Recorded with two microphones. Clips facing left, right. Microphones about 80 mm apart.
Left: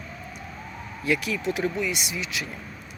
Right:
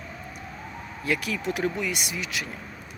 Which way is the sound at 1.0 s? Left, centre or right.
Right.